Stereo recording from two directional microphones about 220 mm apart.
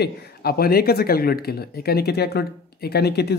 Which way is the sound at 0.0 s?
45° left (ahead or behind).